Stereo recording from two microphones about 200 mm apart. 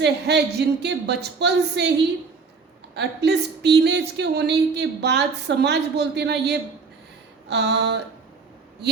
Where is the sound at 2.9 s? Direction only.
55° right (ahead or behind).